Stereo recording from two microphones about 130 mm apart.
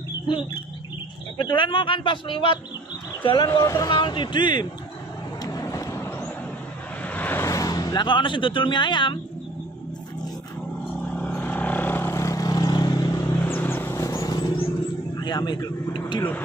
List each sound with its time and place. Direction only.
1.4 s a man's voice: 35° left (ahead or behind)
3.4 s speech: 25° left (ahead or behind)
3.9 s a man's voice: 35° left (ahead or behind)
5.4 s vehicle: 30° left (ahead or behind)
11.0 s vehicle: 10° left (ahead or behind); by 14.6 s 30° left (ahead or behind)
15.1 s a man's voice: 35° left (ahead or behind)
16.2 s a man's voice: 15° left (ahead or behind)